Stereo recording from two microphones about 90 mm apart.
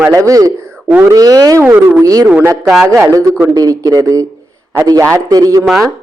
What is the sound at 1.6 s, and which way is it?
Speech, 20° right (ahead or behind).